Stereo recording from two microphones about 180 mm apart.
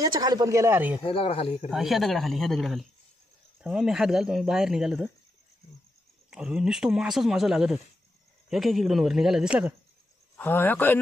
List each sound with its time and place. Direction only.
0.2 s speech: 20° right (ahead or behind)
1.0 s speech: 30° left (ahead or behind)
1.7 s speech: centre (ahead or behind)
6.3 s speech: 5° right (ahead or behind)
10.3 s speech: 10° left (ahead or behind)